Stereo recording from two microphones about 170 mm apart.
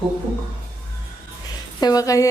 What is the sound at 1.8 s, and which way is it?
Speech, 20° left (ahead or behind).